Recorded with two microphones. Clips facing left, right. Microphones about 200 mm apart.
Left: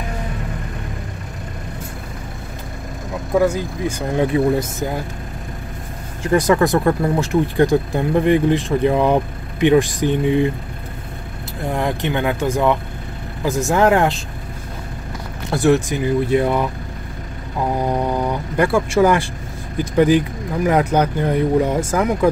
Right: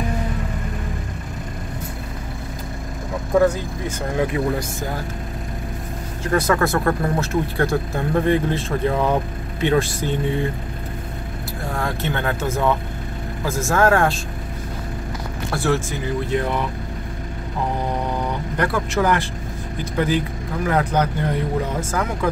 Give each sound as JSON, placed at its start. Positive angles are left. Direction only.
{"t": 3.3, "sound": "speech", "side_deg": 10}
{"t": 4.2, "sound": "speech", "side_deg": 25}
{"t": 6.2, "sound": "speech", "side_deg": 15}
{"t": 11.7, "sound": "speech", "side_deg": 15}
{"t": 15.5, "sound": "speech", "side_deg": 20}
{"t": 18.6, "sound": "speech", "side_deg": 10}